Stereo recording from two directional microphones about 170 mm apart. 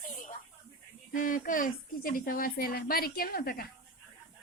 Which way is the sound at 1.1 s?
50° left (ahead or behind).